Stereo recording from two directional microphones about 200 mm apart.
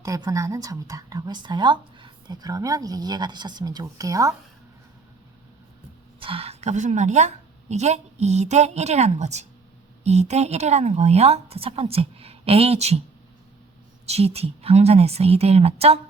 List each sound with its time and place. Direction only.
0.0 s a woman's voice: 15° right (ahead or behind)
6.1 s a woman's voice: 25° right (ahead or behind)
14.1 s a woman's voice: 30° right (ahead or behind)